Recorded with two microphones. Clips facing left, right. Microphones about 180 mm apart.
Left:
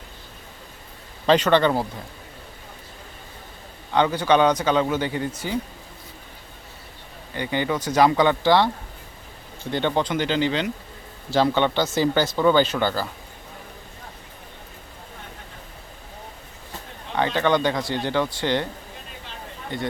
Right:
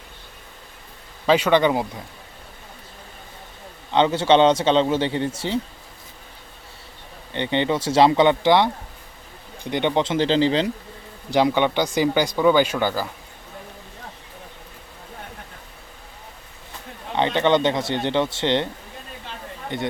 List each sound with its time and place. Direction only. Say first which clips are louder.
1.3 s speech: even; 10° right (ahead or behind)
3.9 s speech: right 2 dB; 25° right (ahead or behind)
7.3 s speech: right 3 dB; 25° right (ahead or behind)
11.3 s speech: right 1 dB; 15° right (ahead or behind)
17.2 s speech: right 2 dB; 20° right (ahead or behind)
19.7 s speech: right 2 dB; 20° right (ahead or behind)